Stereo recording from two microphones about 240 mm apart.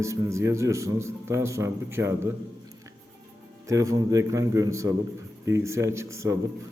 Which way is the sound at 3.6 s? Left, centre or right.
Centre.